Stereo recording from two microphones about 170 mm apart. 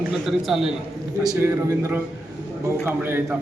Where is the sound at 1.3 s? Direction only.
15° right (ahead or behind).